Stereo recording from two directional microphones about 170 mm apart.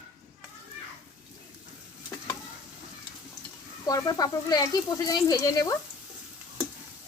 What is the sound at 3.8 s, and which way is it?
Speech, 20° left (ahead or behind).